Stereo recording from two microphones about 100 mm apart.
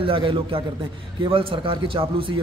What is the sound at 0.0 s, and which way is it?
A man's voice, 60° right (ahead or behind).